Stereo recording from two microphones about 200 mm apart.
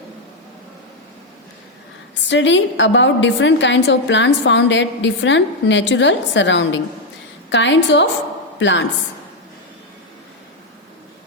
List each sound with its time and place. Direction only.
2.3 s a woman's voice: 65° left (ahead or behind)